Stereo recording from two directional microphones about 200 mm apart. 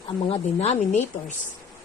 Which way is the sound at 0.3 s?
35° left (ahead or behind).